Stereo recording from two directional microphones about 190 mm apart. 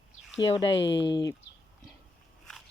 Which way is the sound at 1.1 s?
20° left (ahead or behind).